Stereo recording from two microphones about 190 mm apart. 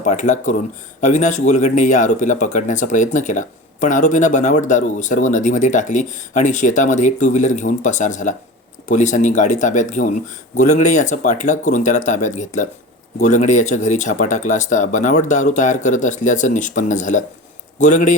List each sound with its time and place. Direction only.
0.0 s speech: 40° left (ahead or behind)